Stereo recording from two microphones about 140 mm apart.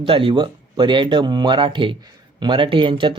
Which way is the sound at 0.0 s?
40° right (ahead or behind).